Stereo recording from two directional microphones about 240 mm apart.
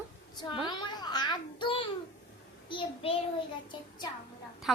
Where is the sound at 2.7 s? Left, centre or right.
Centre.